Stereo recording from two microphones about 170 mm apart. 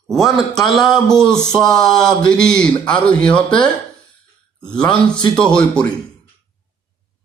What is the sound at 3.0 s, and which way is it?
Speech, 5° left (ahead or behind).